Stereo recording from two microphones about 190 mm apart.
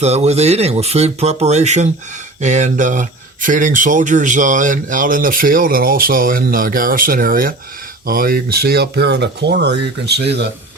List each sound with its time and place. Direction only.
0.0 s speech: 35° right (ahead or behind); by 10.5 s 60° right (ahead or behind)